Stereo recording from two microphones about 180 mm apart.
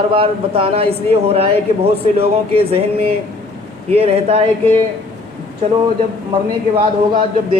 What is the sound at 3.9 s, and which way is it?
Speech, 35° right (ahead or behind).